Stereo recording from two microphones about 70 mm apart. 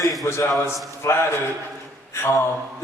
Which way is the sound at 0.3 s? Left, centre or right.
Left.